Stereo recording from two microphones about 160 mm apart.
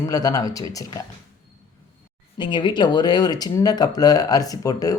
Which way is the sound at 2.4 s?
30° left (ahead or behind).